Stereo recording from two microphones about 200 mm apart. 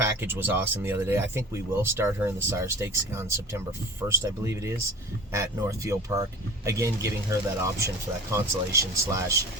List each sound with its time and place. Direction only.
0.0 s speech: 10° right (ahead or behind)